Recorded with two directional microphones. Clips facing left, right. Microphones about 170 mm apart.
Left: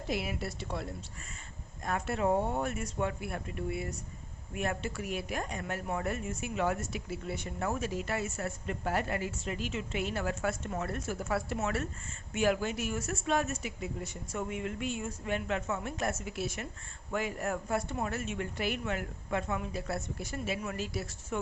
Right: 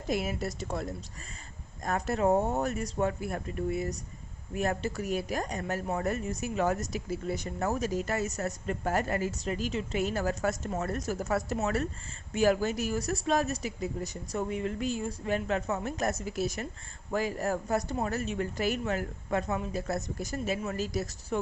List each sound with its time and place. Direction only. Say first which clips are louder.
0.1 s speech: right 4 dB; 45° right (ahead or behind)